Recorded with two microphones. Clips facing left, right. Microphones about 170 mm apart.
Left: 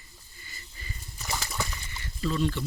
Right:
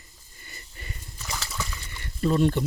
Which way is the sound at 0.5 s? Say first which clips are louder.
Right 2 dB; 60° right (ahead or behind).